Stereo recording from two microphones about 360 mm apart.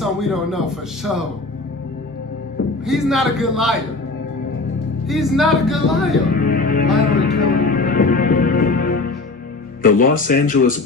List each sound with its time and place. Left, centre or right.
0.0 s a man's voice: centre
2.9 s speech: centre
5.0 s speech: centre
6.3 s music: left
9.8 s speech: left